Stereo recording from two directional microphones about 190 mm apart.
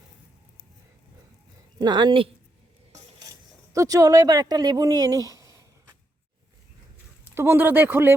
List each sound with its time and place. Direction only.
1.8 s a woman's voice: 20° right (ahead or behind)
2.9 s a sound: 20° right (ahead or behind)
7.3 s speech: 10° right (ahead or behind)